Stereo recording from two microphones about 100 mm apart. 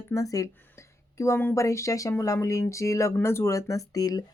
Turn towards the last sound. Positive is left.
turn(degrees=40)  # may be behind; listen again after turning